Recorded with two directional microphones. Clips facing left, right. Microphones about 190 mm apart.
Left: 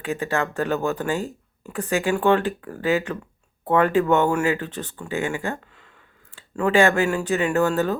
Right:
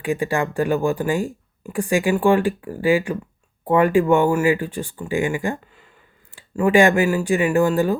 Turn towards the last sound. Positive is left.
turn(degrees=-10)  # may be behind; listen again after turning